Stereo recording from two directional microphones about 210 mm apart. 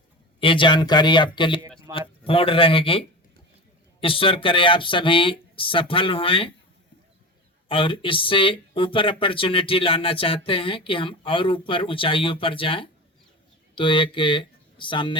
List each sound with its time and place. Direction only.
0.3 s speech: 25° left (ahead or behind)
4.0 s speech: 25° left (ahead or behind)
7.7 s speech: 25° left (ahead or behind)